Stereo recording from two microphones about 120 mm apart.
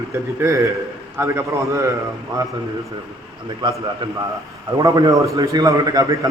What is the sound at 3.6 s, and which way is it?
Speech, 35° right (ahead or behind).